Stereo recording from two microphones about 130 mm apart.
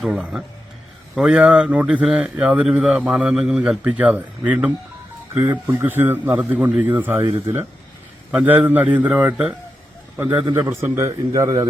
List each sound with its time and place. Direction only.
0.0 s speech: 5° right (ahead or behind)
8.3 s speech: 10° right (ahead or behind)
10.2 s a man's voice: 35° right (ahead or behind)
10.5 s a man's voice: 20° right (ahead or behind)